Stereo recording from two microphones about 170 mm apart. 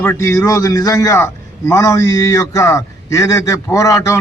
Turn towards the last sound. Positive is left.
turn(degrees=20)  # may be behind; listen again after turning